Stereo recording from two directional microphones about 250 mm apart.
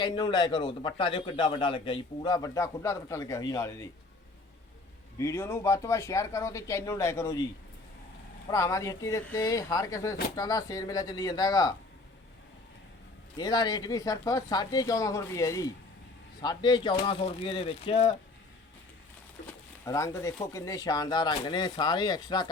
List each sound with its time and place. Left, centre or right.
0.0 s a man's voice: centre
5.1 s a man's voice: centre
8.4 s a man's voice: centre
13.3 s a man's voice: centre
19.8 s a man's voice: centre